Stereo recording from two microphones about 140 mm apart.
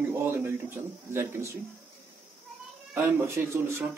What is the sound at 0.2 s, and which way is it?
Speech, 15° right (ahead or behind).